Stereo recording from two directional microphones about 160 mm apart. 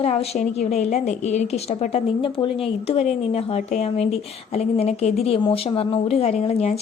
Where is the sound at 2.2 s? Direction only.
35° left (ahead or behind).